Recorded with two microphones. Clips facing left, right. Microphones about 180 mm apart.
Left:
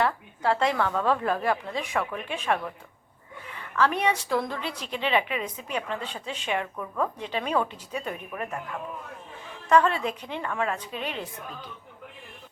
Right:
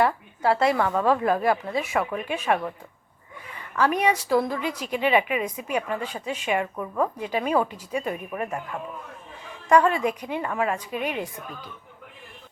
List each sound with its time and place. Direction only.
0.0 s a woman's voice: 10° right (ahead or behind)
3.8 s a woman's voice: 10° right (ahead or behind)
9.6 s a woman's voice: 10° right (ahead or behind)